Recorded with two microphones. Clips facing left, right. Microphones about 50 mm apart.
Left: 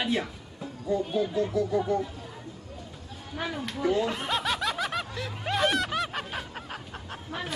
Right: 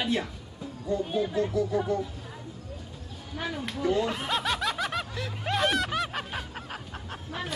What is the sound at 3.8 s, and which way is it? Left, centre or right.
Snicker, centre.